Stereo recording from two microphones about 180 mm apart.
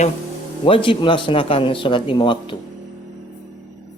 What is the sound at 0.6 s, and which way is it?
Speech, 30° left (ahead or behind).